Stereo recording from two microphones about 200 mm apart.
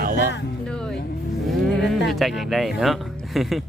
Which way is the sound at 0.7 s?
5° left (ahead or behind).